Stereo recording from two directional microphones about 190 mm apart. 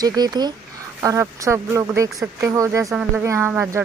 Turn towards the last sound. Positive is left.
turn(degrees=-15)  # may be behind; listen again after turning